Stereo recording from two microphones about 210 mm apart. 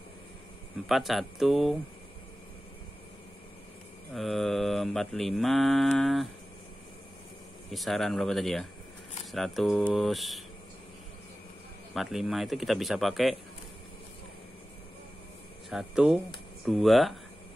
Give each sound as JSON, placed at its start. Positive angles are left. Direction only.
{"t": 0.8, "sound": "mantra", "side_deg": 0}
{"t": 4.1, "sound": "mantra", "side_deg": 0}
{"t": 7.7, "sound": "mantra", "side_deg": 0}
{"t": 11.9, "sound": "mantra", "side_deg": 0}
{"t": 15.7, "sound": "mantra", "side_deg": -5}